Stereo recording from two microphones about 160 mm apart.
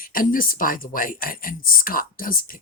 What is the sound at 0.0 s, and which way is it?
Speech, 60° left (ahead or behind).